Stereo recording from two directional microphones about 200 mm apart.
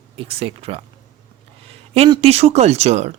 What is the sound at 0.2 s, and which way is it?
Speech, 30° right (ahead or behind).